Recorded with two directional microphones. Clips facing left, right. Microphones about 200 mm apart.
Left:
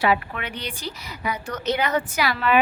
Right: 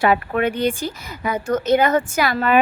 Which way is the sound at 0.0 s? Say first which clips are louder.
Right 5 dB; 50° right (ahead or behind).